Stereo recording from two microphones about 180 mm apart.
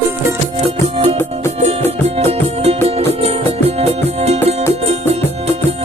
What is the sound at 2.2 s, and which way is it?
Music, 35° right (ahead or behind).